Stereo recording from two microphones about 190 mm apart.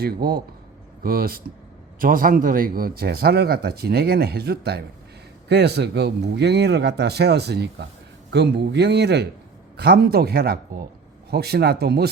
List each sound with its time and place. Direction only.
0.0 s speech: 55° right (ahead or behind)